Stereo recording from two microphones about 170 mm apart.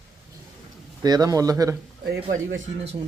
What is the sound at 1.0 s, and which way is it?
Speech, 25° right (ahead or behind).